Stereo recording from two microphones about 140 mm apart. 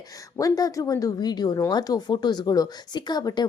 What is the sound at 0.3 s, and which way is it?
Speech, 25° left (ahead or behind).